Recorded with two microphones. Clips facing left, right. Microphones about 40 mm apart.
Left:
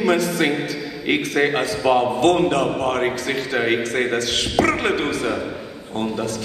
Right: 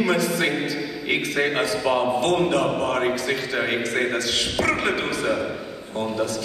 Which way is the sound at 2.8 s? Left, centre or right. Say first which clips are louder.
Left 1 dB; left.